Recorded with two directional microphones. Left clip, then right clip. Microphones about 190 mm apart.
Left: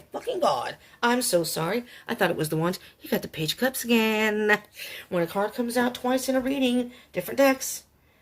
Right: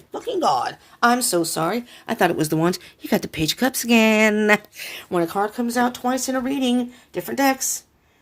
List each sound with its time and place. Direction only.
0.1 s speech: 45° right (ahead or behind)